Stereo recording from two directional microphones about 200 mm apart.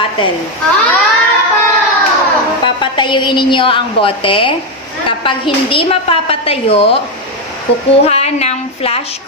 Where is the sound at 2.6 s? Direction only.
25° left (ahead or behind).